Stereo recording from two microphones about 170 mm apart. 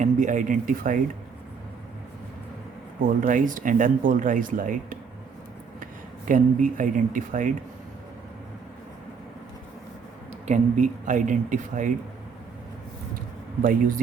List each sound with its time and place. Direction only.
0.0 s speech: 50° right (ahead or behind)
3.0 s speech: 55° right (ahead or behind)
10.4 s speech: 45° right (ahead or behind)
13.6 s speech: 55° right (ahead or behind)